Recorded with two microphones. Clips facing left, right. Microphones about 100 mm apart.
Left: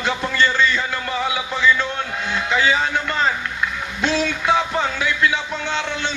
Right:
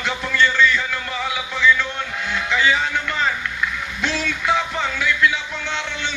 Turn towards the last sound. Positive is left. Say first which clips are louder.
# left 3 dB
turn(degrees=40)  # may be behind; listen again after turning